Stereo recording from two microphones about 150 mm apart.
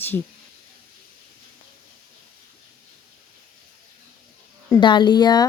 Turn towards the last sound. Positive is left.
turn(degrees=30)  # may be behind; listen again after turning